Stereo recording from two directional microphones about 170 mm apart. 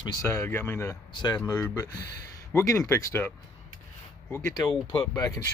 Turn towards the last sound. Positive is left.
turn(degrees=20)  # may be behind; listen again after turning